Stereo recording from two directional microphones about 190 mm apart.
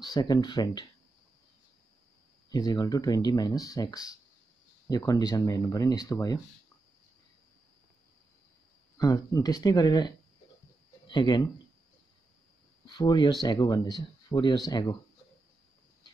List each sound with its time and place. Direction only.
0.0 s speech: 20° left (ahead or behind)
2.5 s speech: 20° left (ahead or behind)
8.9 s speech: 20° left (ahead or behind)
12.8 s speech: 20° left (ahead or behind)